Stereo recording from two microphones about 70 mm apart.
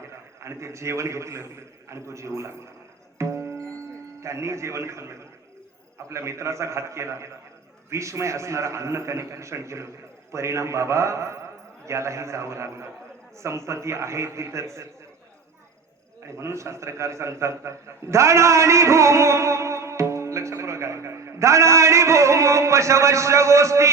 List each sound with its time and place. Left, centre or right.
0.3 s a man's voice: right
3.2 s music: right
4.2 s a man's voice: right
16.2 s a man's voice: right